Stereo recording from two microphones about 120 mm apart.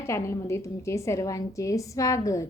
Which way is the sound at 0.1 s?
20° left (ahead or behind).